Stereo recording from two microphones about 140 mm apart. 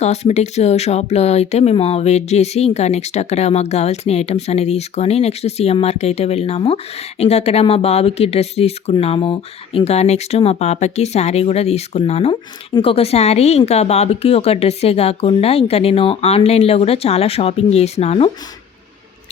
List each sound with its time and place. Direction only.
0.0 s speech: 50° left (ahead or behind)